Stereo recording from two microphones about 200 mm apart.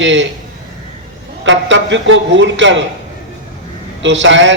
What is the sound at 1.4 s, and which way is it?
A man's voice, 70° right (ahead or behind).